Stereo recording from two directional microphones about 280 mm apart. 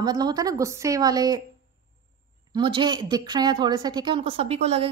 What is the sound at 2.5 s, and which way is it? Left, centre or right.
Speech, centre.